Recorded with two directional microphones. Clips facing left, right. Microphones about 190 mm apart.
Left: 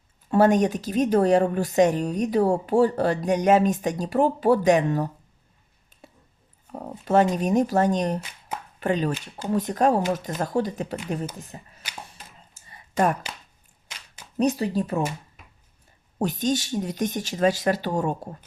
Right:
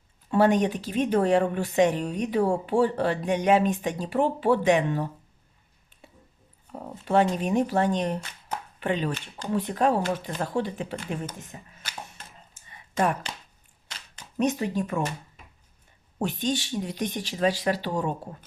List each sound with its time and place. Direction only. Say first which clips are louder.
0.3 s speech: left 3 dB; 45° left (ahead or behind)
5.9 s a sound: left 3 dB; 40° left (ahead or behind)
7.1 s speech: left 3 dB; 40° left (ahead or behind)
12.6 s a sound: left 3 dB; 45° left (ahead or behind)
14.3 s speech: left 3 dB; 35° left (ahead or behind)
16.1 s speech: left 3 dB; 40° left (ahead or behind)